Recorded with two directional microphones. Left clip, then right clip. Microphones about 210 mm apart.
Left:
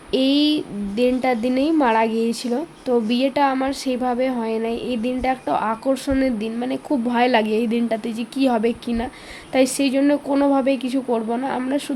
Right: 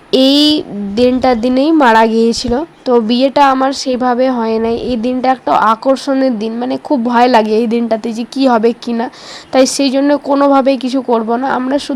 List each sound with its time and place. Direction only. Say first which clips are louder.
0.1 s a woman's voice: right 9 dB; 20° right (ahead or behind)